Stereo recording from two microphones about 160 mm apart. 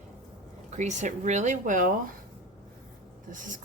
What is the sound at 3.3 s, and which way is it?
Speech, 55° right (ahead or behind).